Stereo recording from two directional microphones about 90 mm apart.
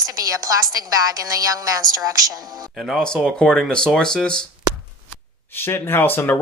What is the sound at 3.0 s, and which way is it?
Speech, 10° left (ahead or behind).